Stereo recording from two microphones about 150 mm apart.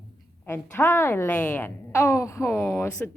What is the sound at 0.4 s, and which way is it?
A woman's voice, 15° left (ahead or behind).